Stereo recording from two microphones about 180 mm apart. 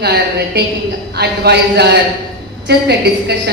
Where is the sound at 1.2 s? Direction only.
65° right (ahead or behind).